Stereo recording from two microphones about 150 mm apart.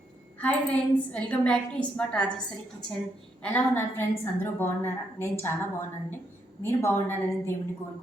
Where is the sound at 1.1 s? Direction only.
5° left (ahead or behind).